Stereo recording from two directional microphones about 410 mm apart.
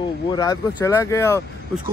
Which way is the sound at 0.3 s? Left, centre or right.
Centre.